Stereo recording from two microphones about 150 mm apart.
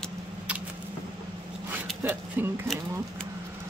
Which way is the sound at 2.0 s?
15° right (ahead or behind).